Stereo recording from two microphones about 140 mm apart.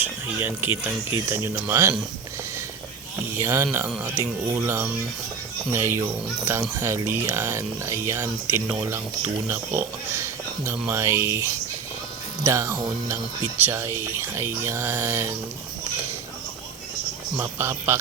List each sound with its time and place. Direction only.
0.0 s speech: 15° right (ahead or behind)
3.3 s speech: 20° right (ahead or behind)
17.3 s speech: 20° right (ahead or behind)